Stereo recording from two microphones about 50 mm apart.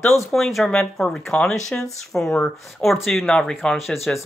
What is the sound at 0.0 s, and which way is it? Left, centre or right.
Speech, left.